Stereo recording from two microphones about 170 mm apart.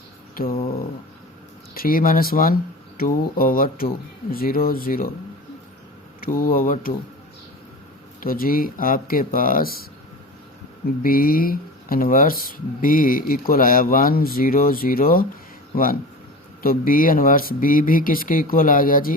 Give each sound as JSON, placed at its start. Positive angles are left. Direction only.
{"t": 0.4, "sound": "speech", "side_deg": 60}
{"t": 1.7, "sound": "speech", "side_deg": 60}
{"t": 6.1, "sound": "speech", "side_deg": 55}
{"t": 8.2, "sound": "speech", "side_deg": 55}
{"t": 11.0, "sound": "speech", "side_deg": 60}